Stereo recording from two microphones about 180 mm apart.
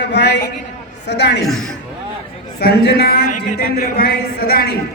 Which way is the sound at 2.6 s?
60° left (ahead or behind).